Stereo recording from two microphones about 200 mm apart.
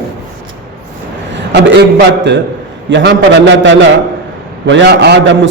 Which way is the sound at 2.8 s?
60° right (ahead or behind).